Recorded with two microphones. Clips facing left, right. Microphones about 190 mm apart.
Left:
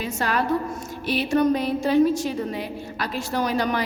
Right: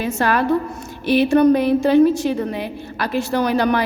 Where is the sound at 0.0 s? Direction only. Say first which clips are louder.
Right 6 dB; 60° right (ahead or behind).